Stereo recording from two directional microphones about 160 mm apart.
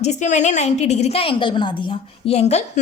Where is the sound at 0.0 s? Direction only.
45° left (ahead or behind).